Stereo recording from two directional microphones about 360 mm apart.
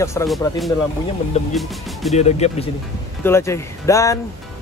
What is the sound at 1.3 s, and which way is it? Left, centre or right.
Speech, centre.